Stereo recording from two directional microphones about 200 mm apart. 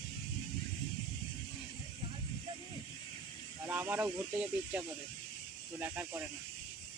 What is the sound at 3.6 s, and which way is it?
Speech, 10° right (ahead or behind).